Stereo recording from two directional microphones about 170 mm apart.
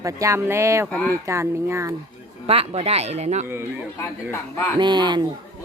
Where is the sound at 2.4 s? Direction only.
35° right (ahead or behind).